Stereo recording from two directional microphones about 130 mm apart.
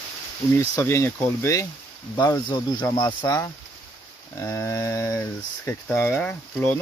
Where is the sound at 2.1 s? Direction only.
35° left (ahead or behind).